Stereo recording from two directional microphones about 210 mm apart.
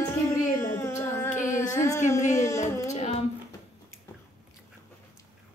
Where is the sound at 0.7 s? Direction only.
15° left (ahead or behind).